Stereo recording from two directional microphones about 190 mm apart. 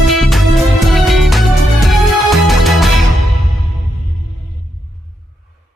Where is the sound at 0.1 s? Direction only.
Centre (ahead or behind).